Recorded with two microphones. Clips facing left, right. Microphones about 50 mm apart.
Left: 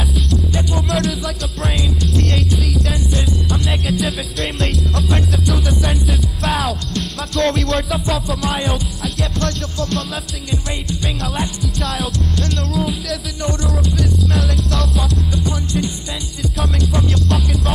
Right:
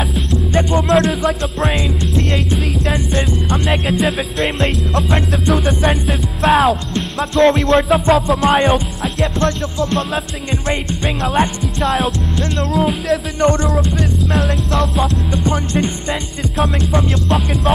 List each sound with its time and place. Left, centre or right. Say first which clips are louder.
0.5 s music: right 7 dB; right
6.6 s music: right 7 dB; right
13.1 s music: right 9 dB; right